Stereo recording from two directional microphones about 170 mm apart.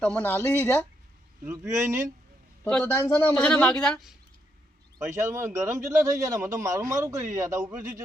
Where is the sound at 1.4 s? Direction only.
15° right (ahead or behind).